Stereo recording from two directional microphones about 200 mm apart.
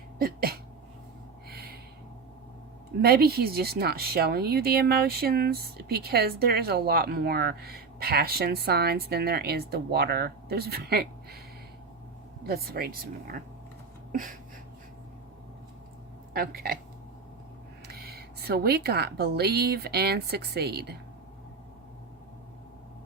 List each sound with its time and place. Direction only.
0.2 s a sound: 50° right (ahead or behind)
3.0 s speech: 50° right (ahead or behind)
12.4 s speech: 50° right (ahead or behind)
14.1 s a sound: 40° right (ahead or behind)
16.3 s speech: 50° right (ahead or behind)
17.8 s speech: 50° right (ahead or behind)